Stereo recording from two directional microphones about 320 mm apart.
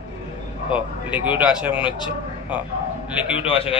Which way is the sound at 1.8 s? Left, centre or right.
Centre.